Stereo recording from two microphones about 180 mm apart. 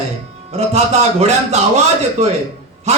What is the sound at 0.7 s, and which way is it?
Speech, 40° right (ahead or behind).